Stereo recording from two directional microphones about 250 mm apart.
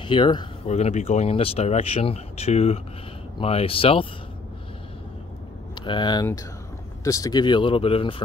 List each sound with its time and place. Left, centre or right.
0.0 s speech: centre
5.9 s speech: centre